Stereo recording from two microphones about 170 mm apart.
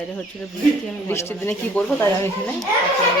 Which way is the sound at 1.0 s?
10° left (ahead or behind).